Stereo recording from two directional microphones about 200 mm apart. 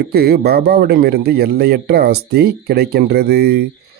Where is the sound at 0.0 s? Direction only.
55° right (ahead or behind).